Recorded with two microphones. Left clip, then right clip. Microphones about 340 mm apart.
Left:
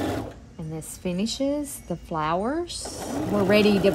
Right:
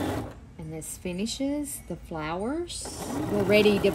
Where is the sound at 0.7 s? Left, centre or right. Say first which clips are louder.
Left 4 dB; left.